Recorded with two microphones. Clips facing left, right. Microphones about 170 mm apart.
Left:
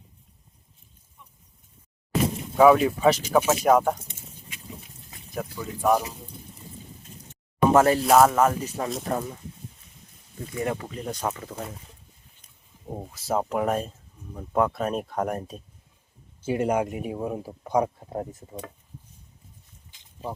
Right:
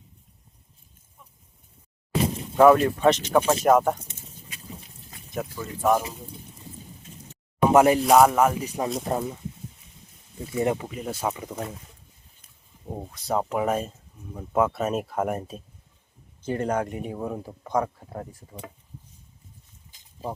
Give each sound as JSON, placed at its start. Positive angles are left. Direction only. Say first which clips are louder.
{"t": 2.6, "sound": "speech", "louder": "right 1 dB", "side_deg": 0}
{"t": 5.3, "sound": "speech", "louder": "right 1 dB", "side_deg": 0}
{"t": 7.7, "sound": "speech", "louder": "right 2 dB", "side_deg": -15}
{"t": 8.0, "sound": "speech", "louder": "right 1 dB", "side_deg": 0}
{"t": 10.6, "sound": "speech", "louder": "right 4 dB", "side_deg": -20}
{"t": 10.8, "sound": "speech", "louder": "right 1 dB", "side_deg": -5}
{"t": 13.0, "sound": "speech", "louder": "even", "side_deg": 5}
{"t": 16.4, "sound": "speech", "louder": "left 2 dB", "side_deg": 10}
{"t": 17.8, "sound": "speech", "louder": "left 4 dB", "side_deg": 25}